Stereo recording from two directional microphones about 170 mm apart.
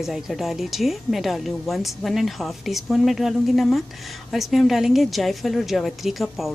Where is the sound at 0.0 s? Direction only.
Centre (ahead or behind).